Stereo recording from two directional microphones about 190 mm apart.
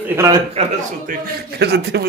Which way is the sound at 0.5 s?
45° right (ahead or behind).